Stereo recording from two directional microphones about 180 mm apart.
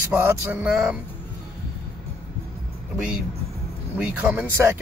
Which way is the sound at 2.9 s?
5° right (ahead or behind).